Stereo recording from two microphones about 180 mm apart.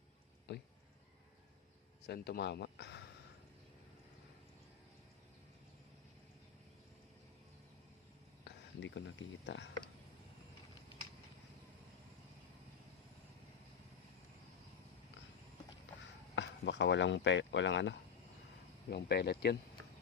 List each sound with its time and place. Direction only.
0.5 s speech: 70° left (ahead or behind)
2.0 s speech: 60° left (ahead or behind)
8.4 s a sound: 90° left
16.3 s speech: 80° left
18.9 s speech: 65° left (ahead or behind)